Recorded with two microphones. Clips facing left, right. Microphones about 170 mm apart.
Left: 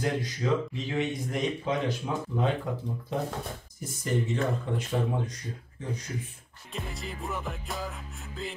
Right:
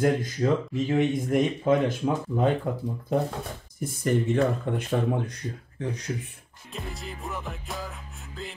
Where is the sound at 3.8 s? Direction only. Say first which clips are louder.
Right 5 dB; 55° right (ahead or behind).